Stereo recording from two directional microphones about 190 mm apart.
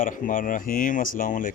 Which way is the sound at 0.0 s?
45° left (ahead or behind).